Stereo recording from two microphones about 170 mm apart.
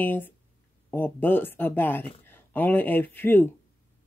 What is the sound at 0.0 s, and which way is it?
Speech, 10° left (ahead or behind).